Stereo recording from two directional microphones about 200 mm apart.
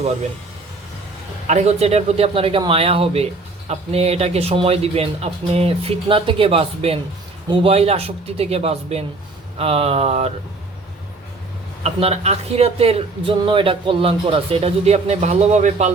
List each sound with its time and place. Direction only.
1.5 s speech: 35° right (ahead or behind)
11.8 s speech: 30° right (ahead or behind)